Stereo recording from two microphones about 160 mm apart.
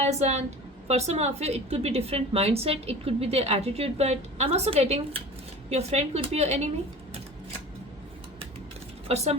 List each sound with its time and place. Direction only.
0.0 s a woman's voice: 40° right (ahead or behind)
9.0 s speech: 40° right (ahead or behind)